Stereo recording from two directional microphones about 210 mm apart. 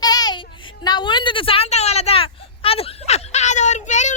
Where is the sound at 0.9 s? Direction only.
20° left (ahead or behind).